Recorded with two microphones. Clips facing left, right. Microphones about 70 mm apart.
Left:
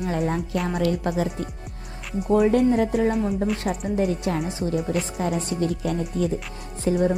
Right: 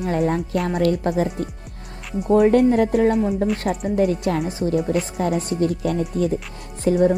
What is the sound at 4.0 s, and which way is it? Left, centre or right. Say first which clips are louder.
Speech: right 5 dB; right.